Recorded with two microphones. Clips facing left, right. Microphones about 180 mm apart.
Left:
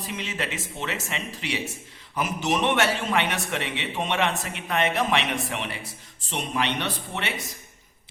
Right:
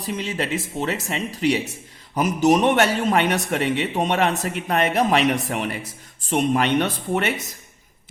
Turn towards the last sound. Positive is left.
turn(degrees=-45)  # may be behind; listen again after turning